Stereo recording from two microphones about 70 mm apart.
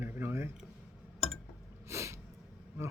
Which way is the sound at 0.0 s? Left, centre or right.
Right.